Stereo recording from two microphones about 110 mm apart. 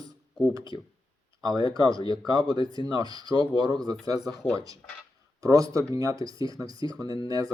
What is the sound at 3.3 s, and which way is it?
Speech, 50° left (ahead or behind).